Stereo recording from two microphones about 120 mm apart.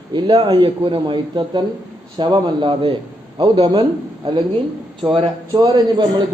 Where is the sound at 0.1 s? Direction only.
40° right (ahead or behind).